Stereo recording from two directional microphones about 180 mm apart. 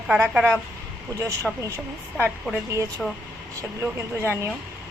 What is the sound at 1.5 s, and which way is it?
A woman's voice, centre (ahead or behind).